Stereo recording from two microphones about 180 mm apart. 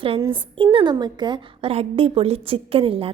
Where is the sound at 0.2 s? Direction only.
25° right (ahead or behind).